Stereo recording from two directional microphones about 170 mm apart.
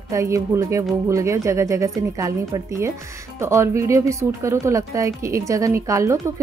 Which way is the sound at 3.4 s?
15° right (ahead or behind).